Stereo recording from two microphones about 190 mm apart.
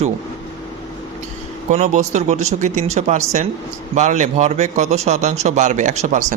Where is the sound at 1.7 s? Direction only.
35° right (ahead or behind).